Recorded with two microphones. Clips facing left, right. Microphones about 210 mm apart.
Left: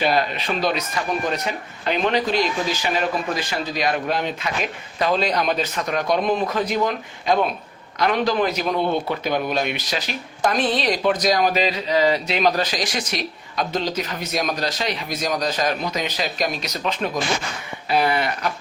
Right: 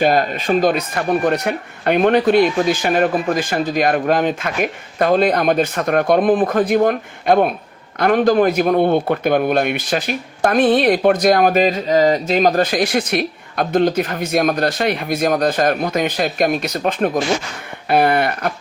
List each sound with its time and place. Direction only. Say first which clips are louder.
0.0 s a man's voice: right 5 dB; 50° right (ahead or behind)